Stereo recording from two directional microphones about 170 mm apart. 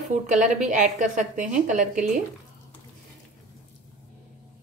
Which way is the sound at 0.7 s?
50° right (ahead or behind).